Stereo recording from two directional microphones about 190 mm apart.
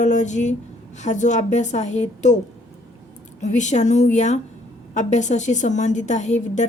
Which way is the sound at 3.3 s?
40° left (ahead or behind).